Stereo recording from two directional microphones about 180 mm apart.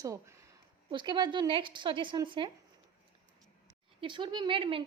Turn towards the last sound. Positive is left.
turn(degrees=-30)  # may be behind; listen again after turning